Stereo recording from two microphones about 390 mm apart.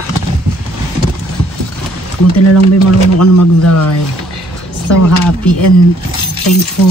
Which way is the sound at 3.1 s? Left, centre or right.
Left.